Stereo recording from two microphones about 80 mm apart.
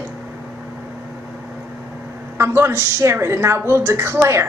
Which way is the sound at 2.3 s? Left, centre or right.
Right.